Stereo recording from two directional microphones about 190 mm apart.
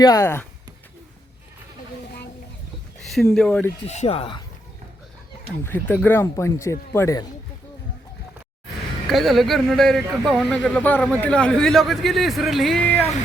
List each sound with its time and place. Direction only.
0.0 s speech: 20° left (ahead or behind)
3.0 s speech: centre (ahead or behind)
3.8 s speech: 35° left (ahead or behind)
5.6 s speech: 10° left (ahead or behind)
9.0 s speech: centre (ahead or behind)